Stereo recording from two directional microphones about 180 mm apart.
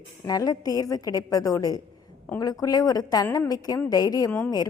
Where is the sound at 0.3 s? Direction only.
20° left (ahead or behind).